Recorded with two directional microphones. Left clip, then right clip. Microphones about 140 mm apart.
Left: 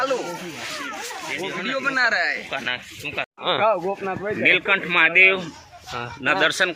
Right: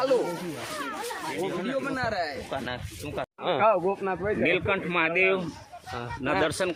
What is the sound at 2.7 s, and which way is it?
Speech, 35° right (ahead or behind).